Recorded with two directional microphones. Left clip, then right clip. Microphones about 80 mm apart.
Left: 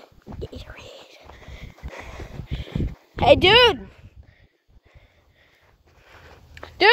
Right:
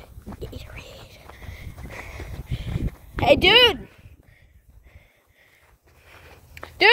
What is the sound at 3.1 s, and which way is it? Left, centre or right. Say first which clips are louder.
Speech: left 1 dB; left.